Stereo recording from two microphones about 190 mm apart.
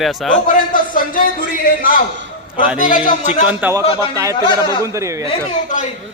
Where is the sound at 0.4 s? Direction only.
45° left (ahead or behind).